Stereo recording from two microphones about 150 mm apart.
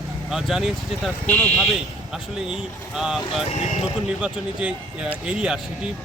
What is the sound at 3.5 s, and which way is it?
Speech, 50° left (ahead or behind).